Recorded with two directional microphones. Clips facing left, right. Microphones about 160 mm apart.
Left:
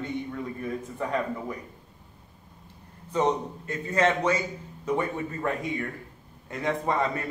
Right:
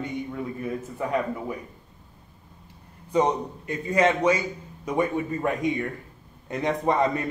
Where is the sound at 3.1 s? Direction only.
15° right (ahead or behind).